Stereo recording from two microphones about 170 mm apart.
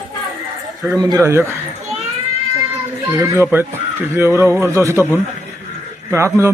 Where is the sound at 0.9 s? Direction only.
20° right (ahead or behind).